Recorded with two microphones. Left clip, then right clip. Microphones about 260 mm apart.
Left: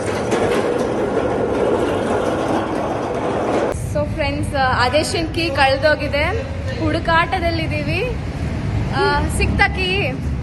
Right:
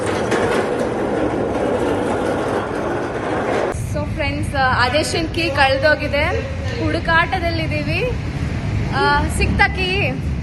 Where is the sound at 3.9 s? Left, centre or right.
Centre.